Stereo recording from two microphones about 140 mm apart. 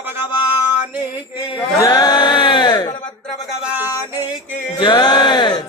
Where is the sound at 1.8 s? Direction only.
30° left (ahead or behind).